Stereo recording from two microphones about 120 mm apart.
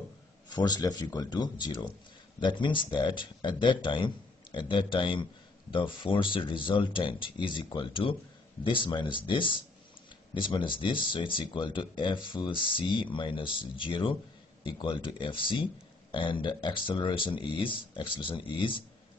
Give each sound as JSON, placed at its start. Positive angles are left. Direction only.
{"t": 0.5, "sound": "speech", "side_deg": 35}